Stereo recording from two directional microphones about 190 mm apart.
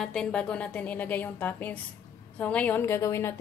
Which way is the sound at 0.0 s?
5° left (ahead or behind).